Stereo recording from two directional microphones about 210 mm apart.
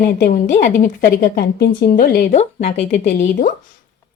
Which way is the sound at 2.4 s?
35° left (ahead or behind).